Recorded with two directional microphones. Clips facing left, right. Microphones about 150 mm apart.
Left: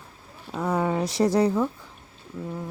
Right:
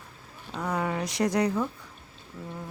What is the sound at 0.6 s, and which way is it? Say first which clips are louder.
Speech: left 5 dB; 25° left (ahead or behind).